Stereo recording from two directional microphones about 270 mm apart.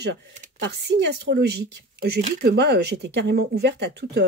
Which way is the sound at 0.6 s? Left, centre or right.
Right.